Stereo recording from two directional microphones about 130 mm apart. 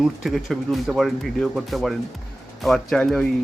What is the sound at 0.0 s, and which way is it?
Speech, centre (ahead or behind).